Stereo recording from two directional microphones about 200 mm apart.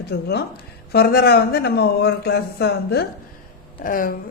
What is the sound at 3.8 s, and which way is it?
Speech, 45° left (ahead or behind).